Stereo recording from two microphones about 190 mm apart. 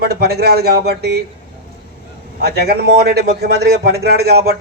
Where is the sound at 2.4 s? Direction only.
55° right (ahead or behind).